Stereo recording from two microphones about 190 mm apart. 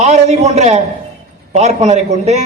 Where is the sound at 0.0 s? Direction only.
35° right (ahead or behind).